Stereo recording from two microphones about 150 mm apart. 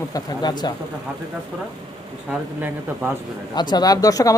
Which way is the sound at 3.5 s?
30° left (ahead or behind).